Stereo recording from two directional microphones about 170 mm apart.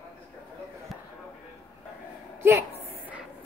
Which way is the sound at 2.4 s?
15° right (ahead or behind).